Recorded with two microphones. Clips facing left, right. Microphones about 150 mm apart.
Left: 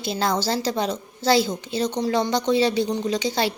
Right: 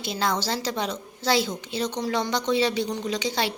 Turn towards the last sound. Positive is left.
turn(degrees=35)  # may be behind; listen again after turning